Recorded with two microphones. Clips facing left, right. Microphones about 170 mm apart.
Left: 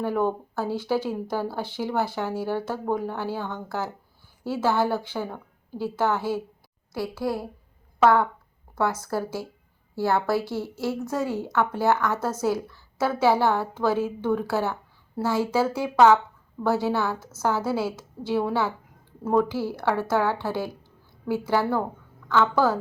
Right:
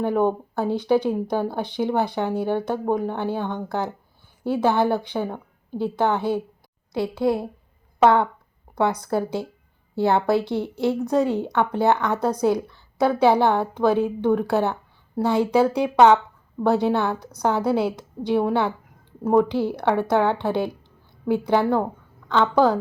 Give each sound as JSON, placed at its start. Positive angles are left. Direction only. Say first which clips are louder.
{"t": 0.0, "sound": "a woman's voice", "louder": "right 4 dB", "side_deg": -20}